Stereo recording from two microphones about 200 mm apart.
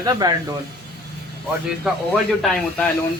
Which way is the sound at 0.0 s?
20° right (ahead or behind).